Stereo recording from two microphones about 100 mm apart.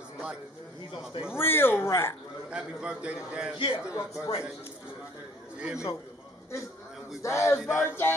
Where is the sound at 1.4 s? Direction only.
25° left (ahead or behind).